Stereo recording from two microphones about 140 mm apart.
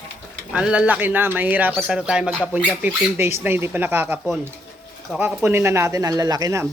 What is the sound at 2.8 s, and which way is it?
Speech, 15° right (ahead or behind).